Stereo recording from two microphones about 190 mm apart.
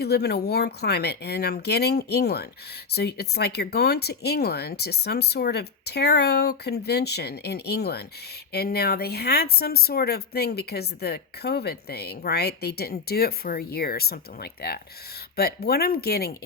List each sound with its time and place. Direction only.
0.0 s speech: 60° left (ahead or behind)